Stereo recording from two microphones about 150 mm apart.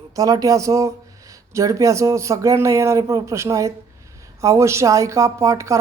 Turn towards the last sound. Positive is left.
turn(degrees=-20)  # may be behind; listen again after turning